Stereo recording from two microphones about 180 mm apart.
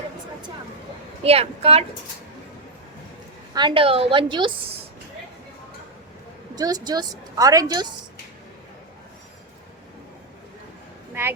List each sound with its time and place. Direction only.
1.2 s a woman's voice: 35° right (ahead or behind)
3.5 s a woman's voice: 25° right (ahead or behind)
6.6 s a woman's voice: 20° right (ahead or behind)